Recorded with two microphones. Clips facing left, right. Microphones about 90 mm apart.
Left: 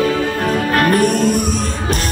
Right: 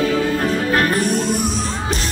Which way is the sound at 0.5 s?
50° left (ahead or behind).